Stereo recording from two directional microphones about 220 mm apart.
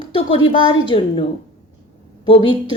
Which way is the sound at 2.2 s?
25° left (ahead or behind).